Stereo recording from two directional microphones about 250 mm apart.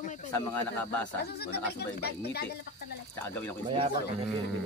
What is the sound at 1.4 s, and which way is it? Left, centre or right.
Speech, left.